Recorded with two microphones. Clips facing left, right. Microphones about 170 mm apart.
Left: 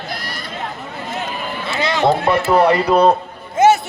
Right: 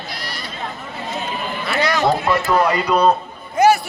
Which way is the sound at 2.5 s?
30° left (ahead or behind).